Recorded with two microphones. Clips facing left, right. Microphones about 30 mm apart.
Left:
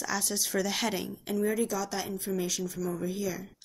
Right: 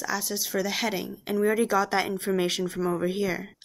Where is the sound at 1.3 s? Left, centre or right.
Right.